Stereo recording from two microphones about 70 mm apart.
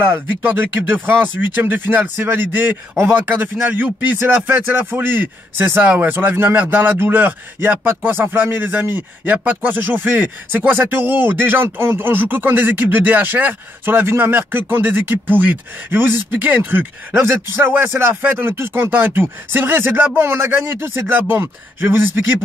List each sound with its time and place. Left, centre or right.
0.0 s speech: right
17.1 s speech: right